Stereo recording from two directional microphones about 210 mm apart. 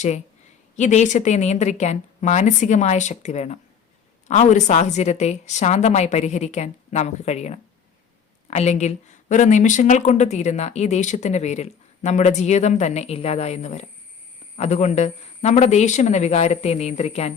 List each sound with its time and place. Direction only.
0.8 s speech: 35° left (ahead or behind)